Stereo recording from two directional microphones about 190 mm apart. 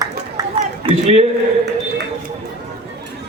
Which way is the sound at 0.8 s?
35° right (ahead or behind).